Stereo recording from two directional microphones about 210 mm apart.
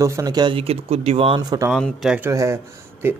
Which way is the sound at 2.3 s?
15° right (ahead or behind).